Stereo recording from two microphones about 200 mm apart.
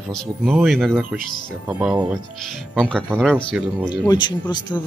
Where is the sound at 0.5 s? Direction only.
5° right (ahead or behind).